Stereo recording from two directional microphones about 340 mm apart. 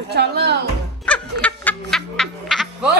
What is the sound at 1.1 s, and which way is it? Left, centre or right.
Music, centre.